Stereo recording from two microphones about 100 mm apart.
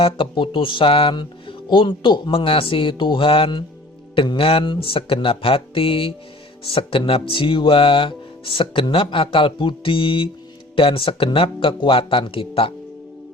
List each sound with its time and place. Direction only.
0.0 s speech: 55° left (ahead or behind)